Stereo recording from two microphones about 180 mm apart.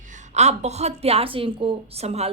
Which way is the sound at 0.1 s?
40° right (ahead or behind).